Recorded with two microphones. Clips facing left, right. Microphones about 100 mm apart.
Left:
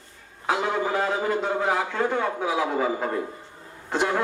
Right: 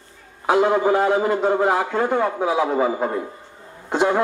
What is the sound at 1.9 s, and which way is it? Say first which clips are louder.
A man's voice: right 5 dB; 25° right (ahead or behind).